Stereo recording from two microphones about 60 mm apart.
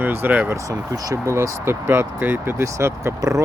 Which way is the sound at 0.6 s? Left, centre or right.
Right.